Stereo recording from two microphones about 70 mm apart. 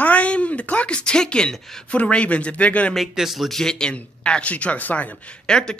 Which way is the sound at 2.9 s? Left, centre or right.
Centre.